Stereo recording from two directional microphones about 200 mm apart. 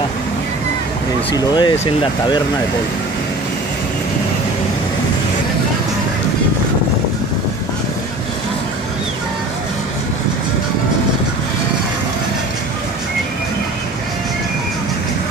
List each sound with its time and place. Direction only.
1.3 s speech: 20° left (ahead or behind)